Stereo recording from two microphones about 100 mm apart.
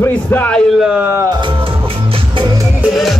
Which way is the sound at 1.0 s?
25° right (ahead or behind).